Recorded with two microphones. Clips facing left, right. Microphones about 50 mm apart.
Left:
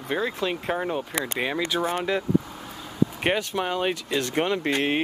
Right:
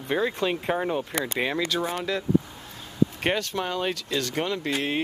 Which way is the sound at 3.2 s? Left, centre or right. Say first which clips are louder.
Left 2 dB; centre.